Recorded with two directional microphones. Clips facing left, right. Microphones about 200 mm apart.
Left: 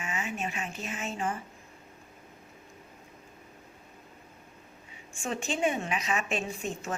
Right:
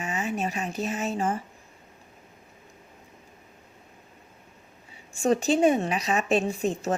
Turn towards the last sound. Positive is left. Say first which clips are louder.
# right 8 dB
turn(degrees=-35)  # may be behind; listen again after turning